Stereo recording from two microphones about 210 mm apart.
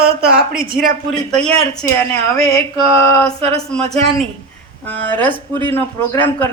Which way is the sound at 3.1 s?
10° left (ahead or behind).